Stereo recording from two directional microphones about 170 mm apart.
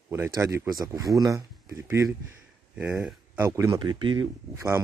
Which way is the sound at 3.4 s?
20° right (ahead or behind).